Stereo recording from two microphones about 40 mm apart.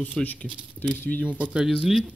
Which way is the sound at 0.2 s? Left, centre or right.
Centre.